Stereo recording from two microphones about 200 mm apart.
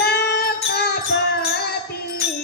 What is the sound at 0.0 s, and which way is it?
Music, 55° left (ahead or behind).